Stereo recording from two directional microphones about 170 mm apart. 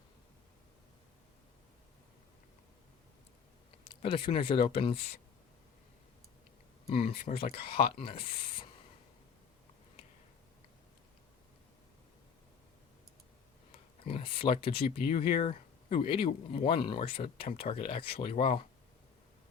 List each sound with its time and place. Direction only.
4.0 s speech: 30° left (ahead or behind)
6.8 s speech: 35° left (ahead or behind)
14.0 s speech: 35° left (ahead or behind)